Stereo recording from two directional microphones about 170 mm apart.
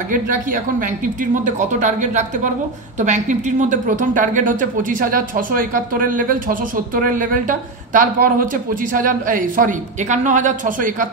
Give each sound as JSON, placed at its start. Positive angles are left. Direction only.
{"t": 0.1, "sound": "speech", "side_deg": -50}